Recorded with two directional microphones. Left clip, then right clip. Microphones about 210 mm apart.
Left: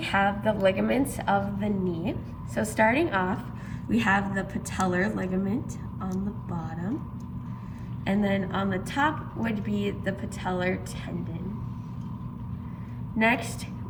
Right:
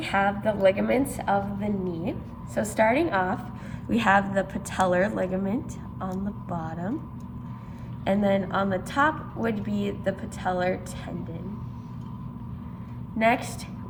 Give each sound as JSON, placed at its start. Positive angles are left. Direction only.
{"t": 0.0, "sound": "a woman's voice", "side_deg": -10}
{"t": 8.0, "sound": "a woman's voice", "side_deg": -20}